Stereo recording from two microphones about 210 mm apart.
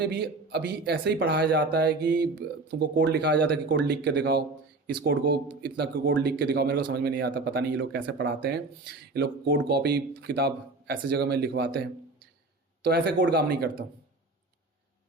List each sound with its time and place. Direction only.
0.0 s speech: 50° right (ahead or behind)